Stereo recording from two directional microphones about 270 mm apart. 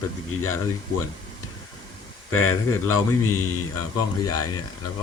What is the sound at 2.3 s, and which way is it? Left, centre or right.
A man's voice, left.